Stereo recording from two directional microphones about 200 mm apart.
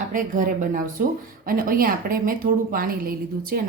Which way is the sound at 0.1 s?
40° right (ahead or behind).